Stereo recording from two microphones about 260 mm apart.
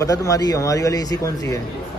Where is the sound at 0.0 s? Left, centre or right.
Centre.